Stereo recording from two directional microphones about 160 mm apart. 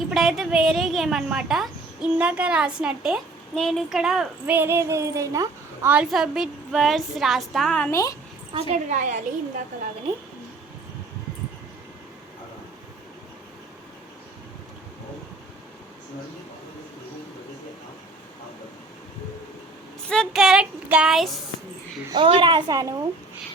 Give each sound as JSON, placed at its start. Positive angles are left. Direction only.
{"t": 0.1, "sound": "a woman's voice", "side_deg": 0}
{"t": 5.9, "sound": "a woman's voice", "side_deg": -5}
{"t": 7.9, "sound": "speech", "side_deg": 20}
{"t": 8.5, "sound": "a woman's voice", "side_deg": -45}
{"t": 20.1, "sound": "a woman's voice", "side_deg": 0}
{"t": 22.1, "sound": "a woman's voice", "side_deg": -30}